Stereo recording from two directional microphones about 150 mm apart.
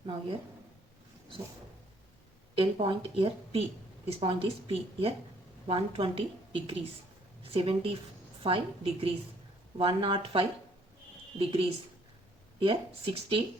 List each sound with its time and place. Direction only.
2.6 s a woman's voice: 35° right (ahead or behind)